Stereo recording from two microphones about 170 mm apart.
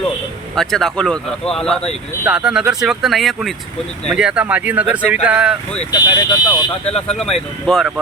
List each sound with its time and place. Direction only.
0.5 s speech: centre (ahead or behind)
5.9 s speech: 25° left (ahead or behind)
7.1 s speech: centre (ahead or behind)